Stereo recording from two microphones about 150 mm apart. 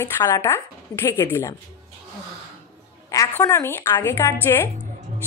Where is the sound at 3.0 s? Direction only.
20° left (ahead or behind).